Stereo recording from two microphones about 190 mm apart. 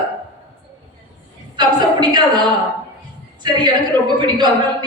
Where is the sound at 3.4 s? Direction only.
20° right (ahead or behind).